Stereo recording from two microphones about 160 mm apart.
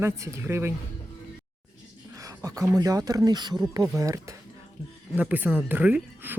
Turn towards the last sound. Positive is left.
turn(degrees=-10)  # may be behind; listen again after turning